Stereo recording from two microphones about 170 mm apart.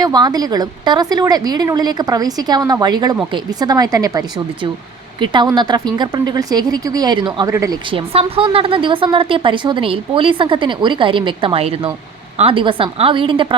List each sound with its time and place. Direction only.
0.0 s speech: 25° right (ahead or behind)
7.9 s a woman's voice: 30° right (ahead or behind)